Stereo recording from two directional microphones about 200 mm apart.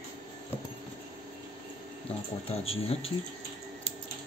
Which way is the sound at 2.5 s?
30° left (ahead or behind).